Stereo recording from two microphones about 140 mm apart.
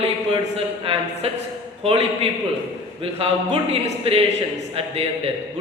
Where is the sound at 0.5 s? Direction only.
45° right (ahead or behind).